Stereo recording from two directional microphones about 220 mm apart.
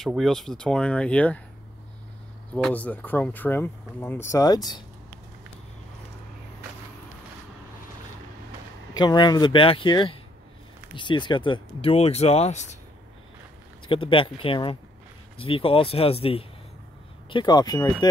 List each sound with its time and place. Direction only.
0.0 s speech: centre (ahead or behind)
2.5 s speech: 5° left (ahead or behind)
8.9 s speech: 20° left (ahead or behind)
13.8 s speech: 25° left (ahead or behind)